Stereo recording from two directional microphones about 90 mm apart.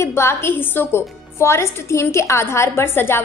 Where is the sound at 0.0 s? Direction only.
30° left (ahead or behind).